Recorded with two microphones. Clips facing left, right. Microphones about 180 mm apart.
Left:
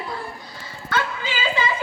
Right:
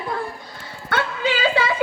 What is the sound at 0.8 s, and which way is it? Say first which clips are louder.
Music: right 3 dB; 65° right (ahead or behind).